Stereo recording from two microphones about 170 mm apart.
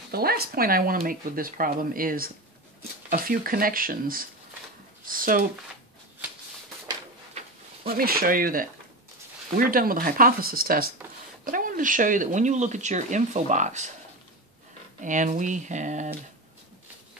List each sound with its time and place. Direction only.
0.1 s speech: 65° right (ahead or behind)
7.8 s speech: 60° right (ahead or behind); by 13.9 s 45° right (ahead or behind)
15.0 s speech: 45° right (ahead or behind)